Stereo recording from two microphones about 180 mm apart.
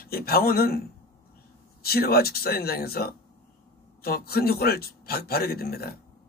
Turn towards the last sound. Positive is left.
turn(degrees=60)  # may be behind; listen again after turning